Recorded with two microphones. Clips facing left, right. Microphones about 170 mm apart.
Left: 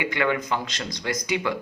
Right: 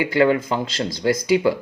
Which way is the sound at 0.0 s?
30° right (ahead or behind).